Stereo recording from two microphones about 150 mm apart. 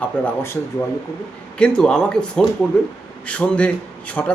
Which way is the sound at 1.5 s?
5° left (ahead or behind).